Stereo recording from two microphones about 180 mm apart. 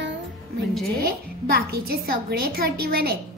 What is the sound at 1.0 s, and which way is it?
A woman's voice, 60° right (ahead or behind).